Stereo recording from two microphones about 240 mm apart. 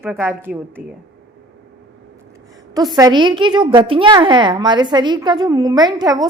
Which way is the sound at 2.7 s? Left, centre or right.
Centre.